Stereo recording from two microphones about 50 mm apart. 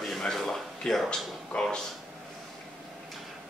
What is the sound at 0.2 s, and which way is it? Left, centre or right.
Speech, centre.